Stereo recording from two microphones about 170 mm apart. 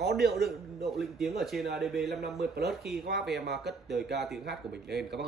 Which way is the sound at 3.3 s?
75° right (ahead or behind).